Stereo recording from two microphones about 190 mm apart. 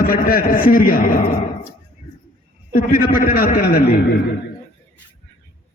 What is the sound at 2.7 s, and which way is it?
A man's voice, 50° left (ahead or behind).